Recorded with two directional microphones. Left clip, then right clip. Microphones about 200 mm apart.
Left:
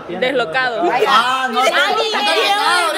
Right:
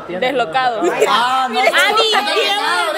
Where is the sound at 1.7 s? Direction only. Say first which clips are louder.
Right 2 dB; 35° right (ahead or behind).